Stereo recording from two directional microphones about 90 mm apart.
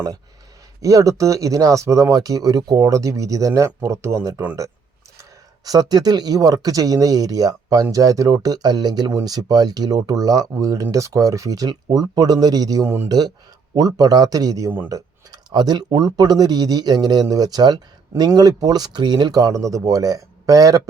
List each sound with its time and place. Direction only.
0.8 s speech: 40° right (ahead or behind)
5.6 s speech: 45° right (ahead or behind)
12.8 s speech: 25° right (ahead or behind)
13.1 s speech: 45° right (ahead or behind)